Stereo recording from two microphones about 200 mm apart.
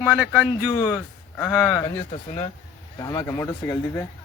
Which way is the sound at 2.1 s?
30° left (ahead or behind).